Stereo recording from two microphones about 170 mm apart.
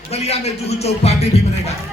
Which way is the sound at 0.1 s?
40° left (ahead or behind).